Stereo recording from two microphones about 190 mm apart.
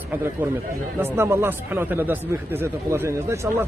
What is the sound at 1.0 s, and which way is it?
Speech, 15° right (ahead or behind).